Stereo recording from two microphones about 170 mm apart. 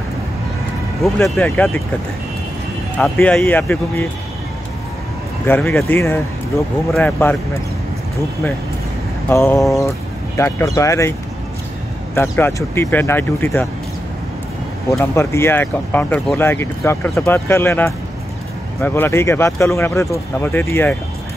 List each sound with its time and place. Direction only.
1.3 s speech: 5° left (ahead or behind)
3.0 s speech: 5° left (ahead or behind)
5.5 s speech: 10° left (ahead or behind)
9.3 s speech: 15° left (ahead or behind)
12.2 s speech: 15° left (ahead or behind)
14.9 s speech: 15° left (ahead or behind)